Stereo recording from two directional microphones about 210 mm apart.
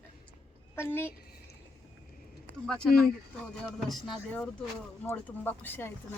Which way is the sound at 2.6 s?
5° left (ahead or behind).